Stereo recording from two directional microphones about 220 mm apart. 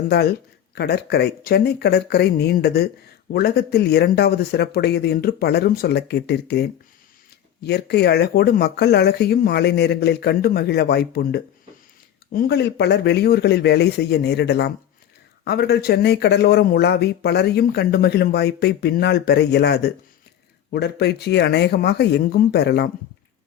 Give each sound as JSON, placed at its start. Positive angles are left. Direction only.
{"t": 0.1, "sound": "speech", "side_deg": 45}